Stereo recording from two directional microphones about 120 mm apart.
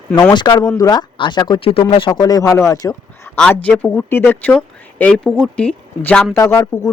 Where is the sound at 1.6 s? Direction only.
50° left (ahead or behind); by 3.4 s 20° left (ahead or behind).